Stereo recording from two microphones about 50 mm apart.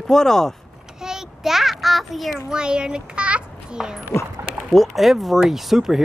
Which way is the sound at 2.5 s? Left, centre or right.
Centre.